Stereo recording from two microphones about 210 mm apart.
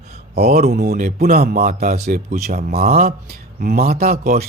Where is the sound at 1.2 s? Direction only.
45° right (ahead or behind).